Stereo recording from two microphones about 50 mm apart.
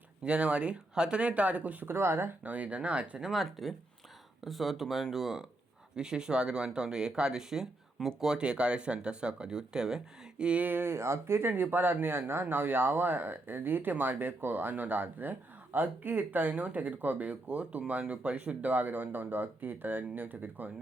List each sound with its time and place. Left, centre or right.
0.3 s speech: right
1.9 s speech: right
2.4 s speech: right
3.2 s speech: centre
8.4 s speech: right
10.7 s speech: right